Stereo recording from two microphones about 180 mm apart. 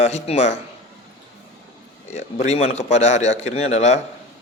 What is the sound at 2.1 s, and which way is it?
Speech, 40° left (ahead or behind).